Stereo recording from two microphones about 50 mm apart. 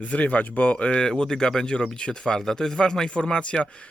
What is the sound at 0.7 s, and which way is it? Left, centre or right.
Speech, centre.